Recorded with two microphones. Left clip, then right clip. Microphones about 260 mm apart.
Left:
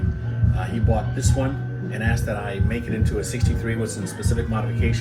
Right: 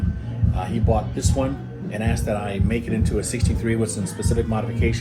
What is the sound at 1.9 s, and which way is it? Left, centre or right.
Speech, right.